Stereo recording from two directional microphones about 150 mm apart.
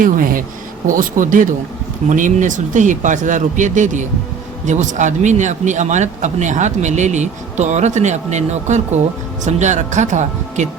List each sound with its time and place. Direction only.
0.0 s speech: 70° right (ahead or behind)